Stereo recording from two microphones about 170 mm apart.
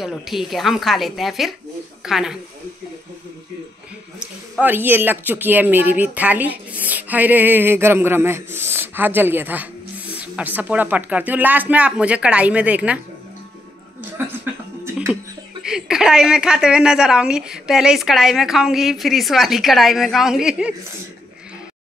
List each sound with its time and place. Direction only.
0.0 s a woman's voice: centre (ahead or behind)
4.2 s speech: 10° right (ahead or behind)
14.1 s music: 10° right (ahead or behind)
15.6 s a woman's voice: 5° right (ahead or behind)